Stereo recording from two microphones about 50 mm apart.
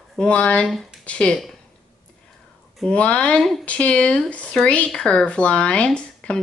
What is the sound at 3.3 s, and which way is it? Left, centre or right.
Speech, centre.